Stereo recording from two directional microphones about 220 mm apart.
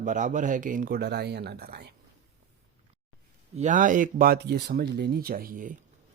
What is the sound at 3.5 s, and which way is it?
Speech, 35° right (ahead or behind).